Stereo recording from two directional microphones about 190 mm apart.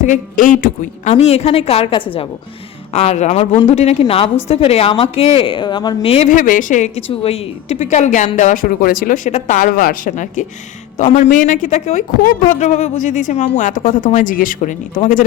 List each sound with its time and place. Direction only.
0.0 s a woman's voice: 45° left (ahead or behind)
6.2 s a woman's voice: 45° left (ahead or behind)